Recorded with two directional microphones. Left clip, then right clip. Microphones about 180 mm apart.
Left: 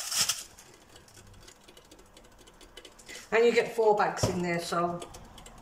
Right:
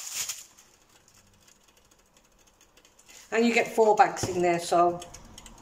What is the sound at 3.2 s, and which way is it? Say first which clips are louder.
Speech: left 1 dB; 45° right (ahead or behind).